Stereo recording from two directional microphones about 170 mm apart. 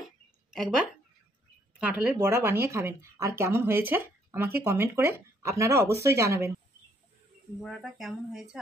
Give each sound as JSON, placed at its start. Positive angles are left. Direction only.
{"t": 0.5, "sound": "speech", "side_deg": -5}
{"t": 7.6, "sound": "speech", "side_deg": 0}